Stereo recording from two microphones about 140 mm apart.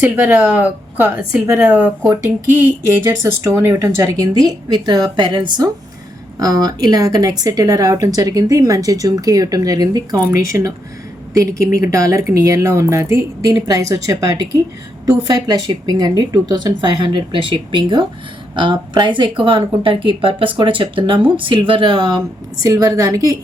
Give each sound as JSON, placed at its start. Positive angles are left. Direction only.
{"t": 0.0, "sound": "speech", "side_deg": -15}
{"t": 22.6, "sound": "speech", "side_deg": -25}